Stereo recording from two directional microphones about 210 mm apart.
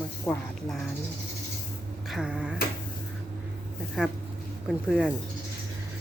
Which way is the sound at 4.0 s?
5° right (ahead or behind).